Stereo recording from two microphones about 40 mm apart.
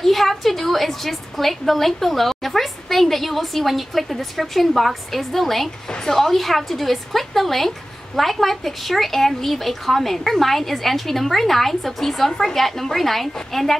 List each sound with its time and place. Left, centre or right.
0.0 s a woman's voice: centre
5.9 s a woman's voice: centre
6.1 s a woman's voice: centre